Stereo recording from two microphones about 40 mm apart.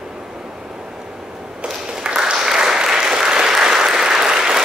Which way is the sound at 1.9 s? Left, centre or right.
Right.